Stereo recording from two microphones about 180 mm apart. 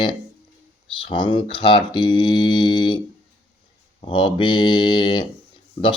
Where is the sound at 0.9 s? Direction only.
25° left (ahead or behind).